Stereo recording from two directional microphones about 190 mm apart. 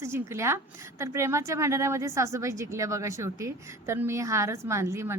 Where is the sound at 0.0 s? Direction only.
15° right (ahead or behind).